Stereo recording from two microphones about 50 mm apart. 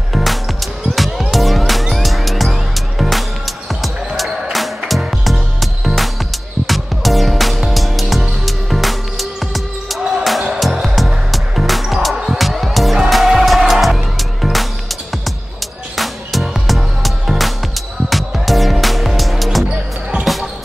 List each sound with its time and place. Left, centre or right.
0.1 s music: centre
16.0 s music: centre